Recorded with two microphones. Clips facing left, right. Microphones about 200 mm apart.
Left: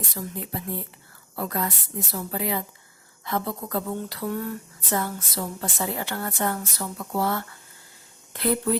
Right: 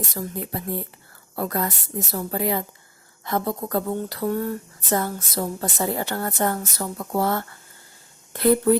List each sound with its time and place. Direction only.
0.1 s speech: 45° right (ahead or behind)